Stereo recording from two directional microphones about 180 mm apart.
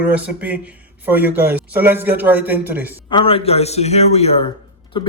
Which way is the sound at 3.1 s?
30° left (ahead or behind).